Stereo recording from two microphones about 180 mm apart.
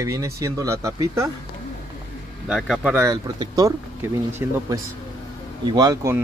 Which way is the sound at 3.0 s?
20° right (ahead or behind).